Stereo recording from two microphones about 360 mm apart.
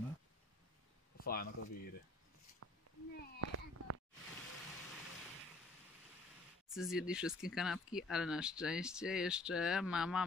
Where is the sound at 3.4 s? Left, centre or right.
Right.